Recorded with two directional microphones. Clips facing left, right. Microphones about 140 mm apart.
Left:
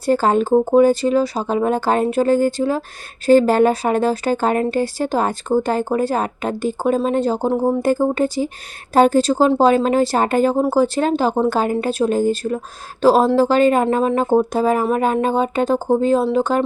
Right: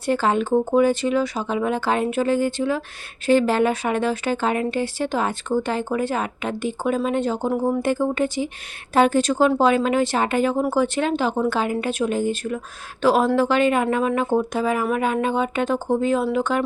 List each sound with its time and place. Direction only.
0.0 s speech: 40° left (ahead or behind)